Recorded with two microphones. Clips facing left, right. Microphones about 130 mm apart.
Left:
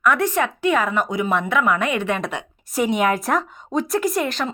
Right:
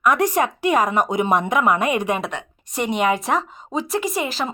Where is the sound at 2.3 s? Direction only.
5° left (ahead or behind).